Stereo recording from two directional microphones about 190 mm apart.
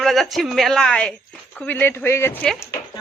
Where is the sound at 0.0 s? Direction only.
Centre (ahead or behind).